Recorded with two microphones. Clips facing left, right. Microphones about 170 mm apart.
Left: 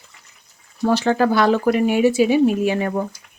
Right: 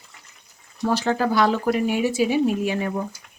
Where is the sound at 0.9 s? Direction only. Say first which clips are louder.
Left 4 dB; 65° left (ahead or behind).